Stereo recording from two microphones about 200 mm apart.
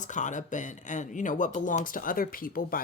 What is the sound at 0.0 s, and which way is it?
Speech, 40° left (ahead or behind).